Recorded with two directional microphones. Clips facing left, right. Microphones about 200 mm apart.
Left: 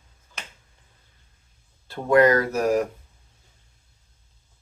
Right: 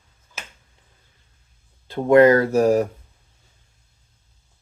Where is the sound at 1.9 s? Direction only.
25° right (ahead or behind).